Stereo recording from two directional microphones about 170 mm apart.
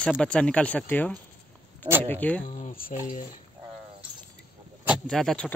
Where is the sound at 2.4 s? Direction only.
50° left (ahead or behind).